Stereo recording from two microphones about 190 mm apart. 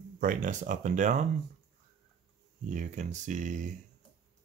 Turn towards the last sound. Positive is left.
turn(degrees=-40)  # may be behind; listen again after turning